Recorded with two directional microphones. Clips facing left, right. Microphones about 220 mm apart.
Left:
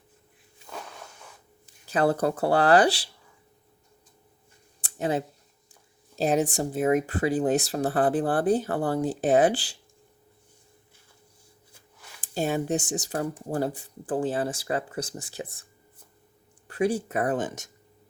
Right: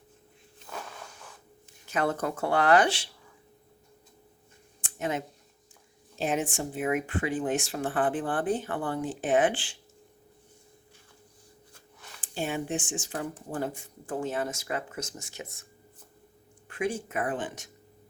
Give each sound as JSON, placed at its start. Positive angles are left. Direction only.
{"t": 1.6, "sound": "speech", "side_deg": 35}
{"t": 4.8, "sound": "a sound", "side_deg": 35}
{"t": 6.1, "sound": "speech", "side_deg": 35}
{"t": 12.2, "sound": "speech", "side_deg": 40}
{"t": 16.6, "sound": "speech", "side_deg": 35}